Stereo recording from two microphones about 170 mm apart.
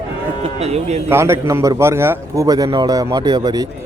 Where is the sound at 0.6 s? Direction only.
40° right (ahead or behind).